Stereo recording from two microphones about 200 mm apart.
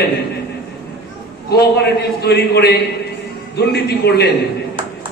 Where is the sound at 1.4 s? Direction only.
55° left (ahead or behind).